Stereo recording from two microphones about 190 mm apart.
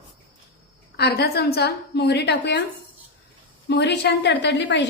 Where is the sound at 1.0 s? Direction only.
55° left (ahead or behind).